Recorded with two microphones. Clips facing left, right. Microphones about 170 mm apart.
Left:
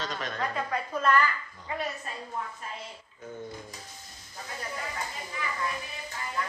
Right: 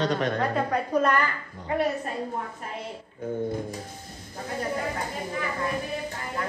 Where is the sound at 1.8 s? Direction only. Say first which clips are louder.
Right 10 dB; 50° right (ahead or behind).